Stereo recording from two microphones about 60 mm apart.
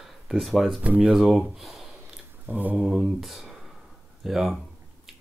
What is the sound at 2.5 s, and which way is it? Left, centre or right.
Mantra, right.